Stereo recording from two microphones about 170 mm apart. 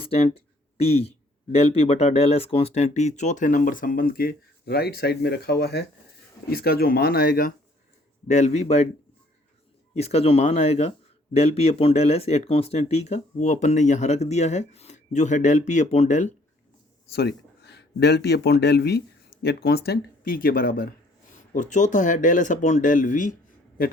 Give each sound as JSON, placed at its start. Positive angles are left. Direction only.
{"t": 0.0, "sound": "a sound", "side_deg": 35}
{"t": 1.5, "sound": "speech", "side_deg": 35}
{"t": 8.3, "sound": "speech", "side_deg": 40}
{"t": 9.9, "sound": "speech", "side_deg": 40}
{"t": 17.2, "sound": "a man's voice", "side_deg": 75}
{"t": 21.5, "sound": "speech", "side_deg": 45}